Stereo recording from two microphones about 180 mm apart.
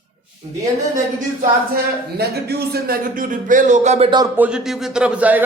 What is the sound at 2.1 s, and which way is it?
Speech, 65° right (ahead or behind).